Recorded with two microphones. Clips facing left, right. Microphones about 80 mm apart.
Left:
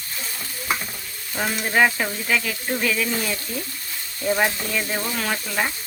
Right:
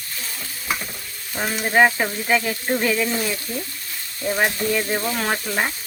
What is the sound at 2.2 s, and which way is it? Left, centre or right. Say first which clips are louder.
Frying: right 5 dB; right.